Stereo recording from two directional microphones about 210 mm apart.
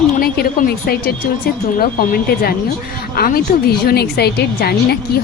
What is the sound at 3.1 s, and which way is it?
A woman's voice, 45° left (ahead or behind).